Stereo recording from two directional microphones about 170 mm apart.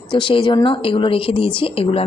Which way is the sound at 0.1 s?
30° left (ahead or behind).